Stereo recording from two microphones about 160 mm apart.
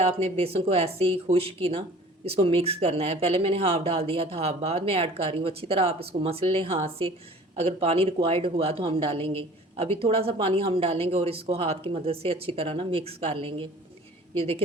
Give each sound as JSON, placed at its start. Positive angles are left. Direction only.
{"t": 0.0, "sound": "speech", "side_deg": -40}